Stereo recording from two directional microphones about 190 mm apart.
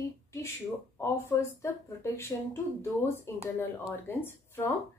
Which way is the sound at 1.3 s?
15° left (ahead or behind).